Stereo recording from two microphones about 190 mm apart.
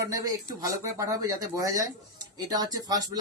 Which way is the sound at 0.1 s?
15° right (ahead or behind).